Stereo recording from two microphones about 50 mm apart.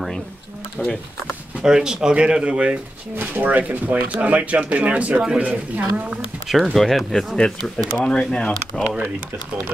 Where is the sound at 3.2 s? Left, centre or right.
Right.